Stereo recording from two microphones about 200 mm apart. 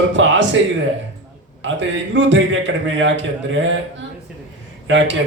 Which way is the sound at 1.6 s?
70° right (ahead or behind).